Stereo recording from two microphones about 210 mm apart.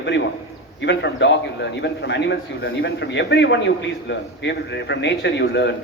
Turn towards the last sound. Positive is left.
turn(degrees=55)  # may be behind; listen again after turning